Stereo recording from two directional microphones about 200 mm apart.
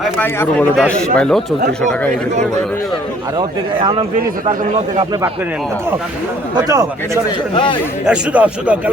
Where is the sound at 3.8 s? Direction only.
30° right (ahead or behind).